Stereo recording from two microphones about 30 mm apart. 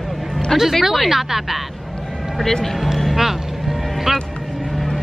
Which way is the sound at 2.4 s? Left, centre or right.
Centre.